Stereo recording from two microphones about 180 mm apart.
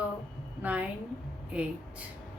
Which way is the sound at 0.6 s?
10° right (ahead or behind).